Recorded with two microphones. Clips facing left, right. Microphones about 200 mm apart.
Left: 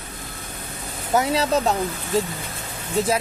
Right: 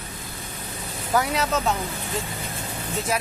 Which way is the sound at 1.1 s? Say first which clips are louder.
Left 3 dB; 25° left (ahead or behind).